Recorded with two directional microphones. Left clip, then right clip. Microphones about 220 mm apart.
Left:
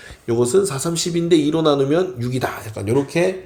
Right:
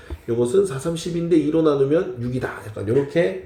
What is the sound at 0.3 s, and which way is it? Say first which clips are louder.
Speech: left 2 dB; 35° left (ahead or behind).